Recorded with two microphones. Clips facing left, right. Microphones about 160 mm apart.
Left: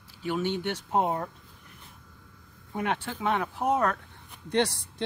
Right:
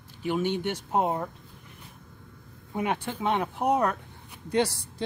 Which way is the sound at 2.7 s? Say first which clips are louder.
Right 1 dB; 10° right (ahead or behind).